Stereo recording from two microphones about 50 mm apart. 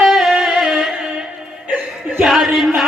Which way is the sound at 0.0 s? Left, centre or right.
Centre.